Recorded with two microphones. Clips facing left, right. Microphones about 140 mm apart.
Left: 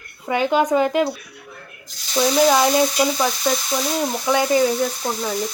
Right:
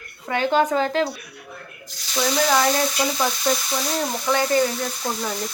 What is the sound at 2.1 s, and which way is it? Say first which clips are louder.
Frying: left 4 dB; 15° left (ahead or behind).